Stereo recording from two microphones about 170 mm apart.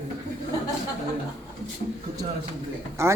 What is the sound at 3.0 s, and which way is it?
Speech, 15° right (ahead or behind).